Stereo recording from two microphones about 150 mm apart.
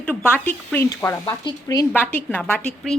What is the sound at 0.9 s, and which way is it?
Speech, 25° left (ahead or behind).